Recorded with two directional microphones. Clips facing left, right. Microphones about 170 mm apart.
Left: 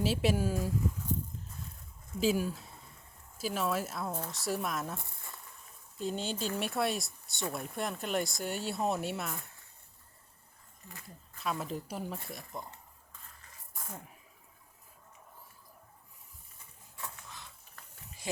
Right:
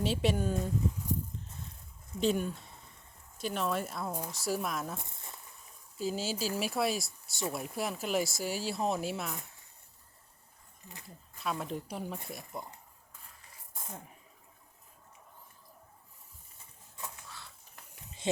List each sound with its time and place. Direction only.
0.0 s speech: 5° left (ahead or behind)
2.1 s speech: 5° left (ahead or behind)
4.9 s speech: 20° right (ahead or behind)
6.0 s speech: 5° right (ahead or behind)
11.3 s speech: centre (ahead or behind)
17.7 s a sound: 20° right (ahead or behind)